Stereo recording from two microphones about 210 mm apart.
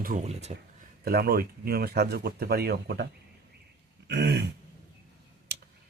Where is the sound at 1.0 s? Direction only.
45° right (ahead or behind).